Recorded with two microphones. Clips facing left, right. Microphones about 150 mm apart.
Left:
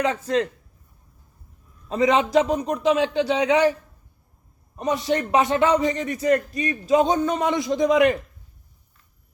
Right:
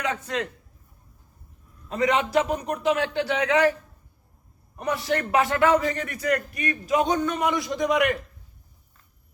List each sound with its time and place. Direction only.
0.0 s a man's voice: 35° left (ahead or behind)
1.9 s a man's voice: 25° left (ahead or behind)
4.8 s a man's voice: 20° left (ahead or behind)